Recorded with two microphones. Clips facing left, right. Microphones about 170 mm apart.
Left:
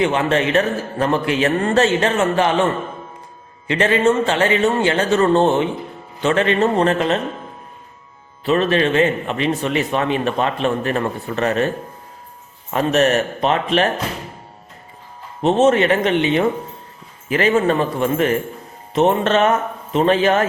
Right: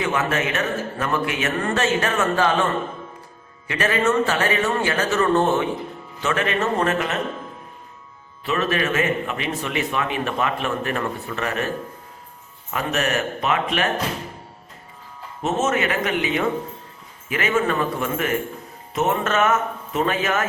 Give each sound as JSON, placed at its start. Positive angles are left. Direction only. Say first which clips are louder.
{"t": 0.0, "sound": "a man's voice", "louder": "left 5 dB", "side_deg": 30}
{"t": 3.7, "sound": "a man's voice", "louder": "left 5 dB", "side_deg": 25}
{"t": 8.4, "sound": "a man's voice", "louder": "left 6 dB", "side_deg": 30}
{"t": 12.7, "sound": "a man's voice", "louder": "left 7 dB", "side_deg": 35}
{"t": 15.4, "sound": "a man's voice", "louder": "left 8 dB", "side_deg": 30}